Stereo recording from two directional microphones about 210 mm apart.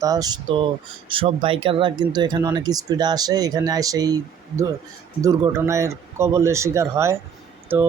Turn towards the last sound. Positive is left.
turn(degrees=-10)  # may be behind; listen again after turning